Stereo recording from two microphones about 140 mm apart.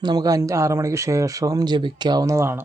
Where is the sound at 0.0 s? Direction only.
30° right (ahead or behind).